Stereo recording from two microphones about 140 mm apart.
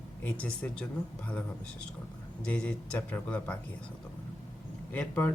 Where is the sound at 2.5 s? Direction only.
10° left (ahead or behind).